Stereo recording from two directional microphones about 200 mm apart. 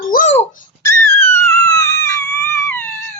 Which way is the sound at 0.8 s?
10° left (ahead or behind).